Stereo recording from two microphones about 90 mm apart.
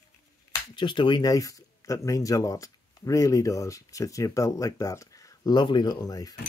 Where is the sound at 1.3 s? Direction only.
40° left (ahead or behind).